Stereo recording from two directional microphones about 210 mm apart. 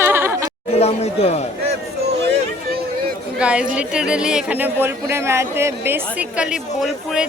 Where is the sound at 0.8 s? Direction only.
30° left (ahead or behind).